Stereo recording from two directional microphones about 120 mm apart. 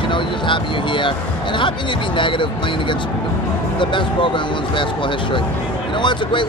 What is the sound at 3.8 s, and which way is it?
Speech, 45° left (ahead or behind).